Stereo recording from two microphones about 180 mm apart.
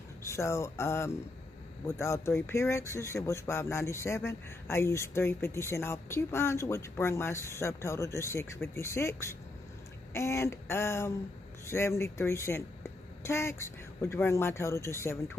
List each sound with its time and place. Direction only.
0.2 s speech: 15° left (ahead or behind)